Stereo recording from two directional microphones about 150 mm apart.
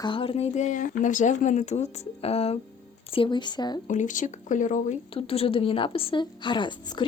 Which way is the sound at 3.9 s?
60° left (ahead or behind).